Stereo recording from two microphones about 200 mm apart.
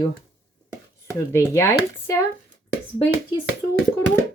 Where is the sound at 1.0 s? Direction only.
15° left (ahead or behind).